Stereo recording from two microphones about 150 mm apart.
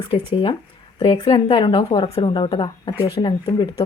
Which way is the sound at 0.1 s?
35° left (ahead or behind).